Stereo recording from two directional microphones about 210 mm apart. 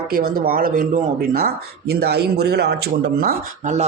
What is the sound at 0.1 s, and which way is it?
Speech, 45° right (ahead or behind).